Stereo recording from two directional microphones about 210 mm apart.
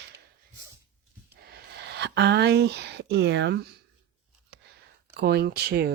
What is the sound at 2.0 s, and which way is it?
Speech, 50° right (ahead or behind).